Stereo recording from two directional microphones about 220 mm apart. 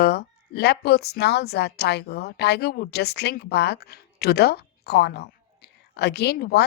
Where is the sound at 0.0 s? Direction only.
45° left (ahead or behind).